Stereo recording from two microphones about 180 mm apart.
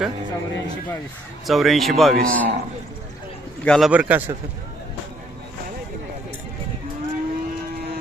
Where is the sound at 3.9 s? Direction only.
10° right (ahead or behind).